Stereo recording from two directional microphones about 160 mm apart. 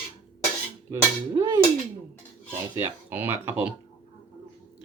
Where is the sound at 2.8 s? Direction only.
15° right (ahead or behind).